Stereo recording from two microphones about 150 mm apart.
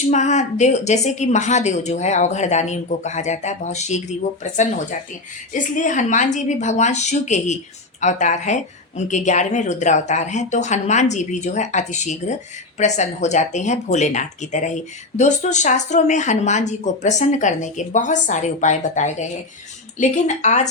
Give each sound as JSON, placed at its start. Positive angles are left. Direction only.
{"t": 0.1, "sound": "speech", "side_deg": 50}